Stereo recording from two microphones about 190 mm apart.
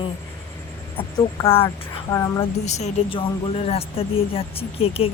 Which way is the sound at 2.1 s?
15° left (ahead or behind).